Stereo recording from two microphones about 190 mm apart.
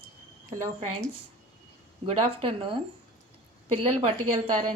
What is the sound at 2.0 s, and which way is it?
Speech, 30° right (ahead or behind).